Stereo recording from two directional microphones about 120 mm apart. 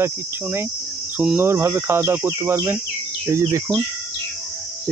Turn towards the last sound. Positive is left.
turn(degrees=-25)  # may be behind; listen again after turning